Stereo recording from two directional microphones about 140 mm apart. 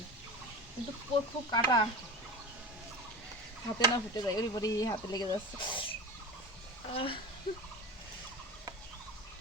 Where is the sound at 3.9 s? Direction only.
30° left (ahead or behind).